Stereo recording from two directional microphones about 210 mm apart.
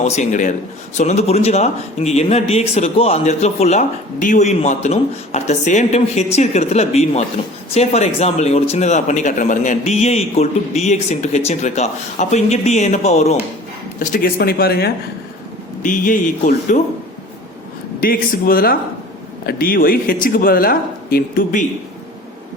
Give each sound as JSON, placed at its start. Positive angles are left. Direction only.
{"t": 0.0, "sound": "speech", "side_deg": 35}
{"t": 15.8, "sound": "speech", "side_deg": 40}
{"t": 18.0, "sound": "speech", "side_deg": 45}